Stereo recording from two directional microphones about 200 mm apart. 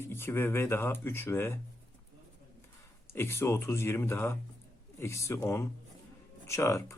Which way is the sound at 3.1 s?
10° left (ahead or behind).